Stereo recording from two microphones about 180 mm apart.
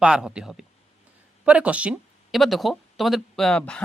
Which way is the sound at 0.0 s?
5° right (ahead or behind).